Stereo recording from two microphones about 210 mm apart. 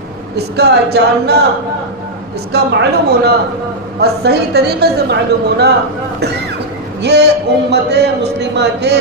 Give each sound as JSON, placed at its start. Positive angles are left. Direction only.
{"t": 0.4, "sound": "a man's voice", "side_deg": -50}
{"t": 2.5, "sound": "a man's voice", "side_deg": -50}
{"t": 7.0, "sound": "a man's voice", "side_deg": -55}